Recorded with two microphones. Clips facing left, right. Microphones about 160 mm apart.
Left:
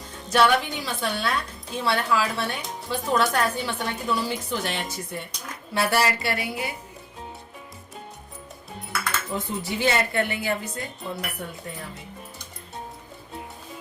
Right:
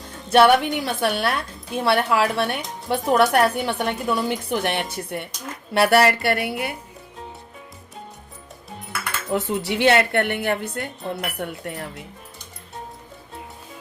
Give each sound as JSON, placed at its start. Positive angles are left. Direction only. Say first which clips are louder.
{"t": 0.3, "sound": "a woman's voice", "louder": "right 5 dB", "side_deg": -60}
{"t": 9.3, "sound": "a woman's voice", "louder": "right 10 dB", "side_deg": -75}